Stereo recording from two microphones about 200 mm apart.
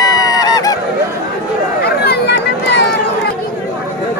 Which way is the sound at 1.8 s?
55° left (ahead or behind).